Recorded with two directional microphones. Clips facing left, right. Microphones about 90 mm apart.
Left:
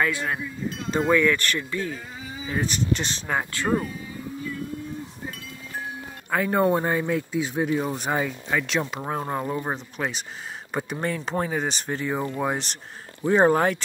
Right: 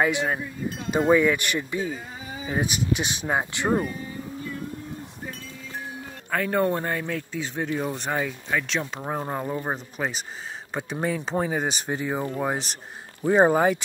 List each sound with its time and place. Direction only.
0.0 s cowbell: 20° right (ahead or behind)
0.9 s speech: 10° right (ahead or behind)
6.3 s speech: 10° left (ahead or behind)
11.0 s speech: 5° right (ahead or behind)